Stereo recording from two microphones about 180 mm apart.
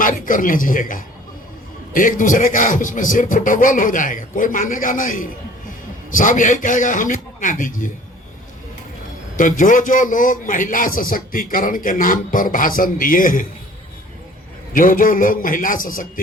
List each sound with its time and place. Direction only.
0.0 s a man's voice: 50° left (ahead or behind)
9.4 s a man's voice: 45° left (ahead or behind)
14.7 s a man's voice: 50° left (ahead or behind)